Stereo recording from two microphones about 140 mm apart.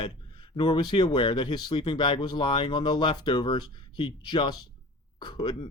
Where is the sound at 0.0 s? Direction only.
35° left (ahead or behind).